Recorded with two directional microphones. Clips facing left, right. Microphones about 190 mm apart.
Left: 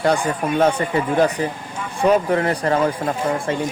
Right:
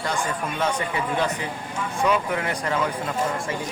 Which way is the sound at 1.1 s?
40° left (ahead or behind).